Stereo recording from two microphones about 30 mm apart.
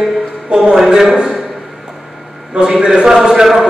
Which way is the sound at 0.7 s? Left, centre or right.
Centre.